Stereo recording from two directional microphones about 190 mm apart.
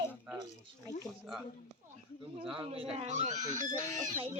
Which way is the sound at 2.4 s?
5° right (ahead or behind).